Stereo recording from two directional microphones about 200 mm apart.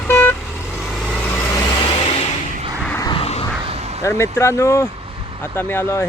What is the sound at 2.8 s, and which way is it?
Vehicle, 5° left (ahead or behind).